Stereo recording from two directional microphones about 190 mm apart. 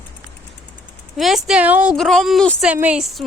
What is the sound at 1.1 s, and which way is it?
Speech, centre (ahead or behind).